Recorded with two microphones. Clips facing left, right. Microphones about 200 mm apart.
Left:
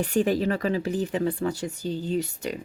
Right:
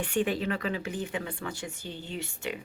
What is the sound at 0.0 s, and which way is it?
Speech, 40° left (ahead or behind).